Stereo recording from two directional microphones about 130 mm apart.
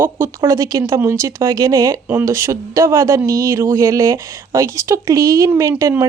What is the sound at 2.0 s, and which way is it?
Speech, 15° right (ahead or behind).